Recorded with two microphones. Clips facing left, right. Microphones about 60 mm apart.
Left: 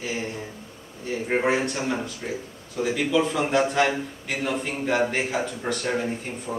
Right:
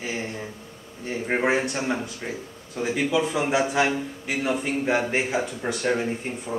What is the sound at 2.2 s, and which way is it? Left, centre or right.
A man's voice, right.